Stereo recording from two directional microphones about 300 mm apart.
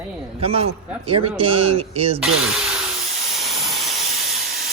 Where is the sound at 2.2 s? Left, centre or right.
Centre.